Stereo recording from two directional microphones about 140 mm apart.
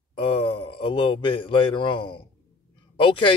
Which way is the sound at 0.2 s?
40° left (ahead or behind).